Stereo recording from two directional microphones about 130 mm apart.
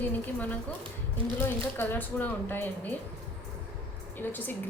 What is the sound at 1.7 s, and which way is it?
A woman's voice, 15° left (ahead or behind).